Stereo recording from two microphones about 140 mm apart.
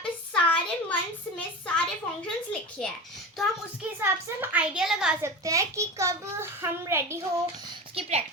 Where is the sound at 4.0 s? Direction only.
15° right (ahead or behind).